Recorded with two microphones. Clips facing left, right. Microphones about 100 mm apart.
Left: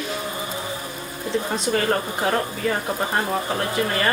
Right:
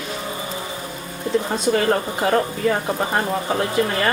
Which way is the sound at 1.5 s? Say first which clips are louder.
Right 3 dB; centre (ahead or behind).